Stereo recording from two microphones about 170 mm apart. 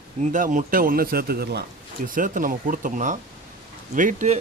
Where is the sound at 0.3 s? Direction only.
50° right (ahead or behind).